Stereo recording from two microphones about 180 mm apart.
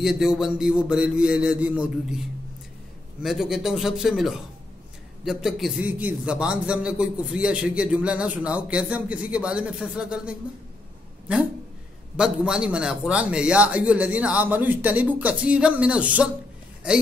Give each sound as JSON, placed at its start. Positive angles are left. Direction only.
{"t": 0.0, "sound": "a man's voice", "side_deg": -5}
{"t": 12.2, "sound": "speech", "side_deg": -5}